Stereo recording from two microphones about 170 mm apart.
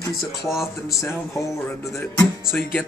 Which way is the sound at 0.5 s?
Centre (ahead or behind).